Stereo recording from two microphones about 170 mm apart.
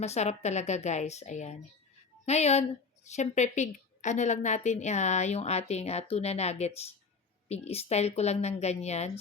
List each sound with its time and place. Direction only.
0.0 s speech: 40° left (ahead or behind)